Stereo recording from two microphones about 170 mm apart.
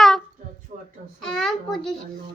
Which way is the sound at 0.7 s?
45° right (ahead or behind).